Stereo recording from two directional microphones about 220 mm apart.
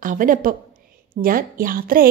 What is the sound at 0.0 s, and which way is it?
A woman's voice, 40° right (ahead or behind).